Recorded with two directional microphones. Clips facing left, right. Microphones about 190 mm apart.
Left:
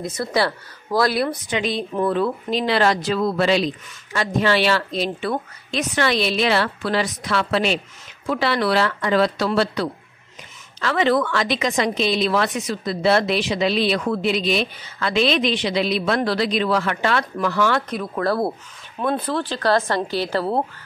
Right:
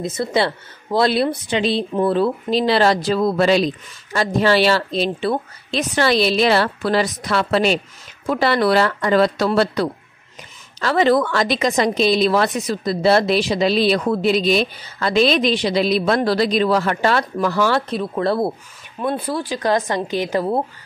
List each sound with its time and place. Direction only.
0.0 s a woman's voice: 25° right (ahead or behind)
18.9 s speech: 10° right (ahead or behind)